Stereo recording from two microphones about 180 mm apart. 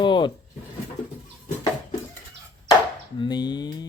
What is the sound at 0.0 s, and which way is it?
Drawer open or close, 25° left (ahead or behind).